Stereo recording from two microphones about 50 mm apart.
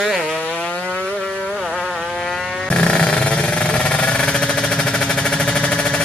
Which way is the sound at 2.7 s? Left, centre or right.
Centre.